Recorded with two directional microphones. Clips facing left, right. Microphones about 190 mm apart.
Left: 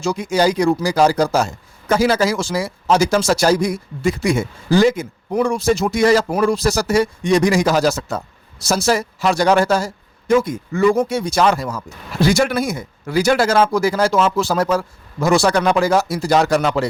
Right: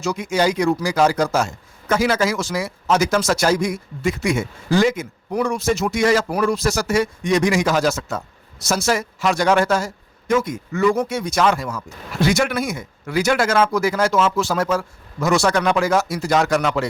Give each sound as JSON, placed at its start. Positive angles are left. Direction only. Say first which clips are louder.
{"t": 0.0, "sound": "a man's voice", "louder": "left 3 dB", "side_deg": 30}